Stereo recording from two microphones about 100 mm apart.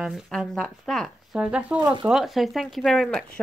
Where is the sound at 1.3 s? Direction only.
10° right (ahead or behind).